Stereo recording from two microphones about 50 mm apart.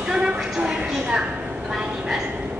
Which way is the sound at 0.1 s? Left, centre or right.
Right.